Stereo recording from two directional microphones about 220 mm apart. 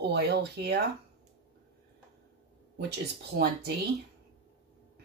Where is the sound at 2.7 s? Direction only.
50° right (ahead or behind).